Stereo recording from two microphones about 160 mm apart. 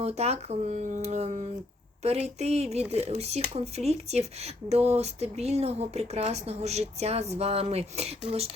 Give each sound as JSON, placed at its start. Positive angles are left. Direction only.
{"t": 0.0, "sound": "a woman's voice", "side_deg": -40}